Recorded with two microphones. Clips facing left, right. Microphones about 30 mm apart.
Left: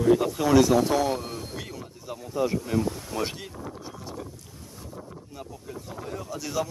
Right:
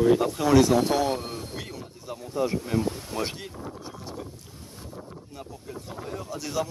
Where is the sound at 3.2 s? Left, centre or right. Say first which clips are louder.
Left 1 dB; right.